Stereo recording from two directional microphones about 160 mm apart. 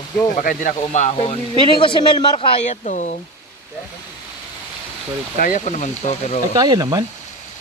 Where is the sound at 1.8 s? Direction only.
30° left (ahead or behind); by 3.2 s 50° left (ahead or behind).